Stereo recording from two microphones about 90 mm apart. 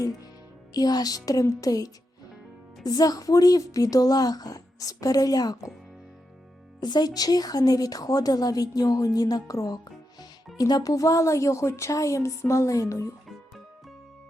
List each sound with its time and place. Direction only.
0.7 s speech: 45° left (ahead or behind)
6.7 s speech: 50° left (ahead or behind)